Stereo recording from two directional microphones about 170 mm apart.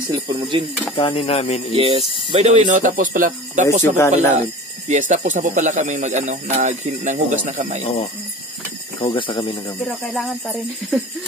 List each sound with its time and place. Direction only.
0.1 s speech: 30° right (ahead or behind)
0.9 s speech: 30° left (ahead or behind)
1.8 s speech: 35° right (ahead or behind); by 3.6 s 50° right (ahead or behind)
3.9 s speech: 15° left (ahead or behind)
4.4 s speech: 45° right (ahead or behind)
9.0 s speech: 30° left (ahead or behind)
9.8 s speech: centre (ahead or behind)